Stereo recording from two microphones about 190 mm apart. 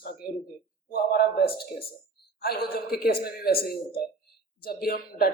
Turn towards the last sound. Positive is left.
turn(degrees=50)  # may be behind; listen again after turning